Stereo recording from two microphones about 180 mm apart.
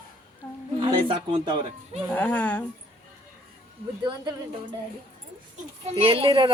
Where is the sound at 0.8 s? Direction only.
30° right (ahead or behind).